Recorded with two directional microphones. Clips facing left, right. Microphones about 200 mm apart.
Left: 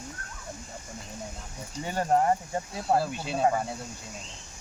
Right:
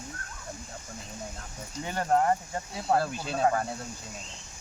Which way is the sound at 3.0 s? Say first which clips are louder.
Left 1 dB; centre (ahead or behind).